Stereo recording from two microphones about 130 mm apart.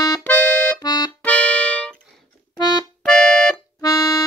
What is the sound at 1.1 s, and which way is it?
Music, 10° left (ahead or behind).